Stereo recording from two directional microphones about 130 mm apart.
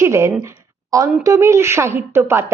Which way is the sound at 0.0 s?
20° right (ahead or behind).